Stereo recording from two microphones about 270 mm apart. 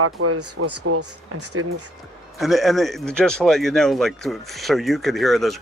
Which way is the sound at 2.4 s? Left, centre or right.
Centre.